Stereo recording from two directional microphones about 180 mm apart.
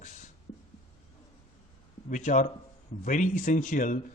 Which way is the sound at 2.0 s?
45° left (ahead or behind).